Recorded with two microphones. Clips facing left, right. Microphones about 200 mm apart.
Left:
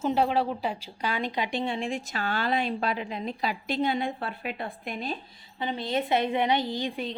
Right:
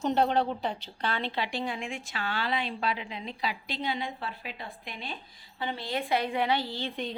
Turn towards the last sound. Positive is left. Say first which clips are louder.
# left 4 dB
turn(degrees=15)  # may be behind; listen again after turning